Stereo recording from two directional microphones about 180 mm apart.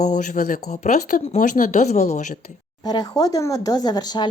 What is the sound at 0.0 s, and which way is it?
Speech, 40° left (ahead or behind).